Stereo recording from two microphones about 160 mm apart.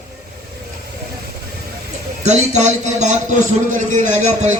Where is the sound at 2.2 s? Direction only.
45° right (ahead or behind).